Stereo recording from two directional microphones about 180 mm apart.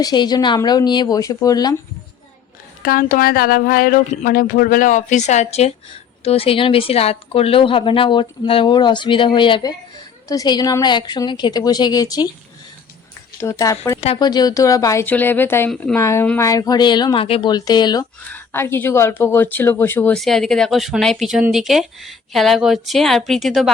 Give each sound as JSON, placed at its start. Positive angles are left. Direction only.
{"t": 0.0, "sound": "speech", "side_deg": 25}
{"t": 2.8, "sound": "speech", "side_deg": 55}
{"t": 13.4, "sound": "speech", "side_deg": 15}
{"t": 18.3, "sound": "speech", "side_deg": 10}